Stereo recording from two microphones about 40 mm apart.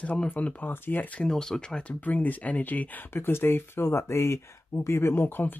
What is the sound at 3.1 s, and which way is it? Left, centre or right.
Speech, left.